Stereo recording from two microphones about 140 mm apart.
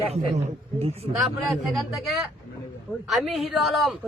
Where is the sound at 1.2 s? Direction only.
Centre (ahead or behind).